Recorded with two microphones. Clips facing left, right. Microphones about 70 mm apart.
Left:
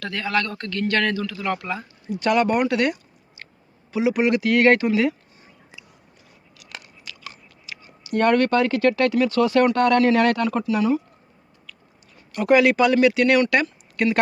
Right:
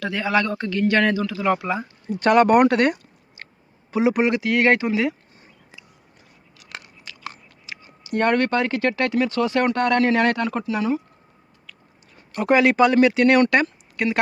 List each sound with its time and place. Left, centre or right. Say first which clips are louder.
0.0 s a man's voice: right 3 dB; centre
2.1 s speech: right 5 dB; right
4.3 s speech: left 2 dB; right
6.6 s speech: right 2 dB; right
12.1 s speech: left 1 dB; right
13.9 s speech: left 3 dB; centre